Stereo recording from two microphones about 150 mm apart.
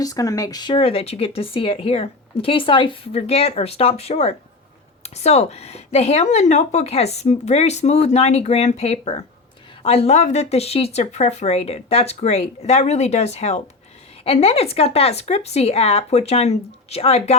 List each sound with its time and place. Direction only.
0.0 s speech: 25° left (ahead or behind); by 17.3 s 45° left (ahead or behind)